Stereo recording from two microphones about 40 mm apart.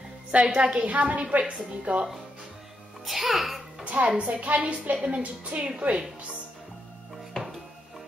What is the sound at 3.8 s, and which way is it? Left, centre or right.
A woman's voice, right.